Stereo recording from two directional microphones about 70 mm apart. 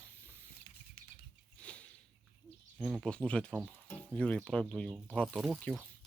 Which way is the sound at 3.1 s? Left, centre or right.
Centre.